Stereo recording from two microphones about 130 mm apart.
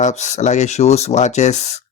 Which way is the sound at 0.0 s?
65° left (ahead or behind).